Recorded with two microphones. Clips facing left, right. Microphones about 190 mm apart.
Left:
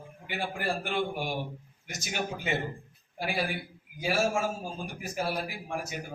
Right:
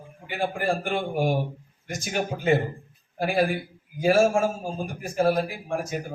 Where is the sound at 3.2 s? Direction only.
45° right (ahead or behind).